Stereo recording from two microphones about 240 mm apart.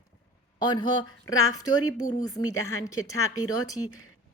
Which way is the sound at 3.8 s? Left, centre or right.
Left.